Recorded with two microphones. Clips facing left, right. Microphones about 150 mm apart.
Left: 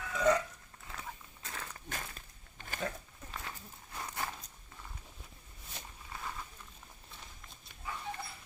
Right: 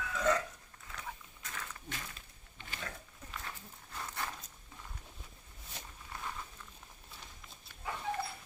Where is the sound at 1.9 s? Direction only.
45° left (ahead or behind).